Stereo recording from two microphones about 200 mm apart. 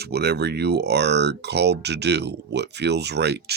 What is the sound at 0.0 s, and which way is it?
Speech, 55° right (ahead or behind).